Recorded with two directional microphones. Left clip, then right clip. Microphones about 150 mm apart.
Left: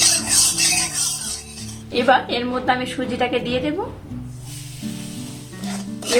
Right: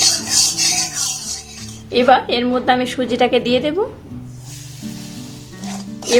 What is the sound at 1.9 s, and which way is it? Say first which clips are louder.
A woman's voice: right 4 dB; 50° right (ahead or behind).